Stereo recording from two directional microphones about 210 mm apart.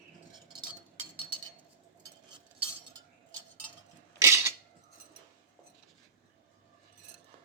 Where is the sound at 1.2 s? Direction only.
20° right (ahead or behind).